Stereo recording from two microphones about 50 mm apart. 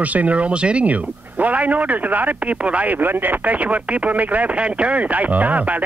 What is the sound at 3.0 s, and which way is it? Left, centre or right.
Speech, right.